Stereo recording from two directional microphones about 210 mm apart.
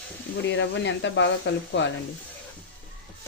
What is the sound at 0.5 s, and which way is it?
Speech, 60° left (ahead or behind).